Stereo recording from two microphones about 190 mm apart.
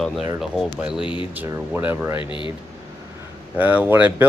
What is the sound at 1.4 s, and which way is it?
Speech, 10° right (ahead or behind).